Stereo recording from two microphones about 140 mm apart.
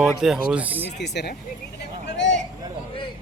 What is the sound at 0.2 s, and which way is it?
Speech, 5° right (ahead or behind).